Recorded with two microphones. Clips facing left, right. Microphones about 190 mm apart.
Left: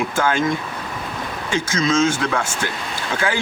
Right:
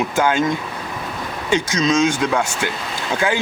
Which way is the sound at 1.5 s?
20° right (ahead or behind).